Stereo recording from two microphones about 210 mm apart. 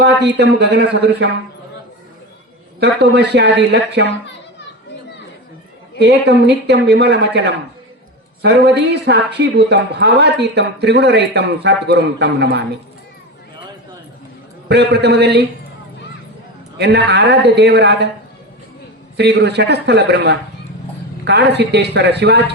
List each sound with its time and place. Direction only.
0.0 s speech: 55° right (ahead or behind)
2.8 s speech: 55° right (ahead or behind)
6.0 s speech: 55° right (ahead or behind)
14.7 s speech: 50° right (ahead or behind)
16.7 s speech: 50° right (ahead or behind)
19.1 s speech: 50° right (ahead or behind)